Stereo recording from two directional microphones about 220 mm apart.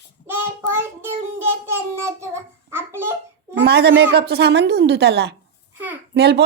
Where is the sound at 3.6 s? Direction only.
45° right (ahead or behind).